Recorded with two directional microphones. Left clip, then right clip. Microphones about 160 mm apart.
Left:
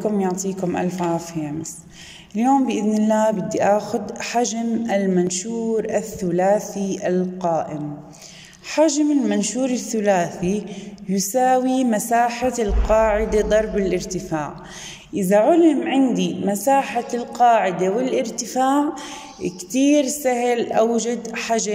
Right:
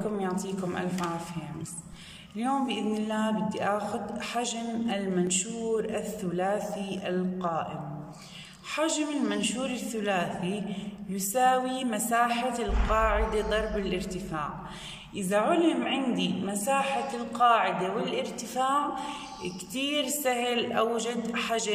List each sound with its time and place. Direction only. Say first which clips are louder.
0.2 s speech: left 9 dB; 40° left (ahead or behind)
2.3 s speech: left 11 dB; 40° left (ahead or behind)
8.7 s speech: left 12 dB; 35° left (ahead or behind)